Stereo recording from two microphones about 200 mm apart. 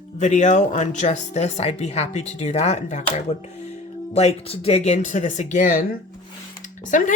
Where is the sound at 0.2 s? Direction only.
35° left (ahead or behind).